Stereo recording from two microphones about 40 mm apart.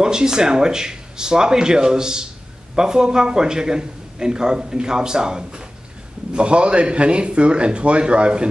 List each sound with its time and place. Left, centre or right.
0.0 s a man's voice: centre